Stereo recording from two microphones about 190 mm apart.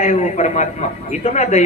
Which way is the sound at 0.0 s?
40° left (ahead or behind).